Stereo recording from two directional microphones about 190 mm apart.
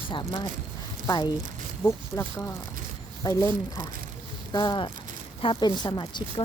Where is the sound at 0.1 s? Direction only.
20° left (ahead or behind).